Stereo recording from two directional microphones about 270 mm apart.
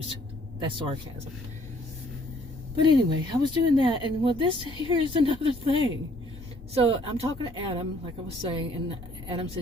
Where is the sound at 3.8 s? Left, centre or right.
Centre.